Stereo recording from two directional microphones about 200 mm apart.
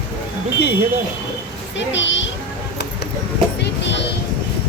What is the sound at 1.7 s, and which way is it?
Speech, 65° left (ahead or behind).